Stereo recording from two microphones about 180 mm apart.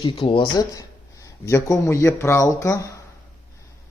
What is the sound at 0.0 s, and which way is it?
Speech, 25° left (ahead or behind).